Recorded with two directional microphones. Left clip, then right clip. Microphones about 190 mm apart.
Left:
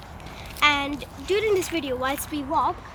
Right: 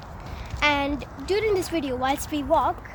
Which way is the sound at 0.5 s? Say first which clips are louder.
Left 1 dB; 50° right (ahead or behind).